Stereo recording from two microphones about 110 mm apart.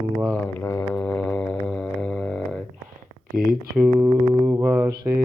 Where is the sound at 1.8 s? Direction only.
5° left (ahead or behind).